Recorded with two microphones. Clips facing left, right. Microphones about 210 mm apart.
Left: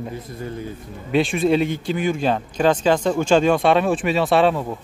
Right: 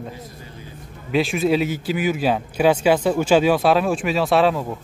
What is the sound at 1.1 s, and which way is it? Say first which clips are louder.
Speech: left 1 dB; centre (ahead or behind).